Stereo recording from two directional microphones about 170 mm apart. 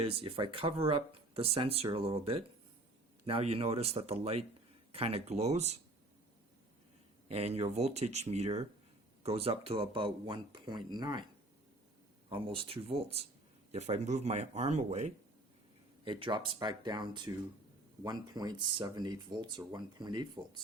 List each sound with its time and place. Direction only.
0.0 s speech: 30° right (ahead or behind)
7.3 s speech: 35° right (ahead or behind)
12.3 s speech: 30° right (ahead or behind)
16.0 s speech: 30° right (ahead or behind)